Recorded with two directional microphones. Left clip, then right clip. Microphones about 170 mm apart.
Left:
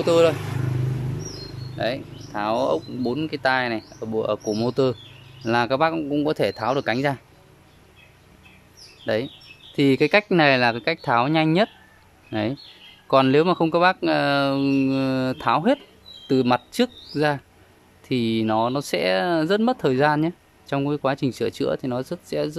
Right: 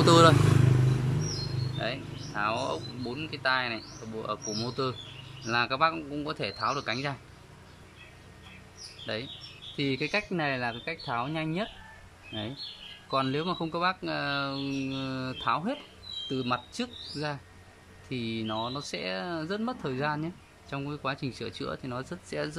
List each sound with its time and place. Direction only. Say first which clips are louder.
0.0 s speech: left 2 dB; 5° left (ahead or behind)
1.8 s speech: left 9 dB; 30° left (ahead or behind)
9.0 s speech: left 11 dB; 40° left (ahead or behind)
10.3 s speech: left 13 dB; 60° left (ahead or behind)
13.1 s speech: left 12 dB; 50° left (ahead or behind); by 22.6 s 25° left (ahead or behind)